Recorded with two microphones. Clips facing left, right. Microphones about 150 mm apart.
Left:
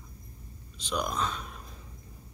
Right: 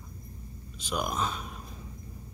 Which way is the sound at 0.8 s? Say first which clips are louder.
Even; 10° right (ahead or behind).